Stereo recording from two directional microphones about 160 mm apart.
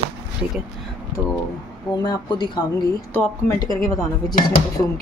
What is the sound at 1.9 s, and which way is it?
Speech, 25° left (ahead or behind).